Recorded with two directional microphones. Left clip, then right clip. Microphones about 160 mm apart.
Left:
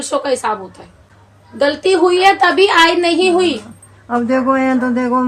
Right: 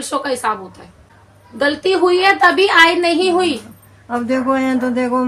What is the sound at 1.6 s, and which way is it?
A woman's voice, 15° left (ahead or behind).